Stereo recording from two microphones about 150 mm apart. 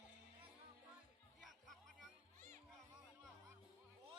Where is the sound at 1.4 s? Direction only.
Centre (ahead or behind).